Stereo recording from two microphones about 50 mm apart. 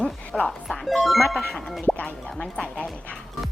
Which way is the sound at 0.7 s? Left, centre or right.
Left.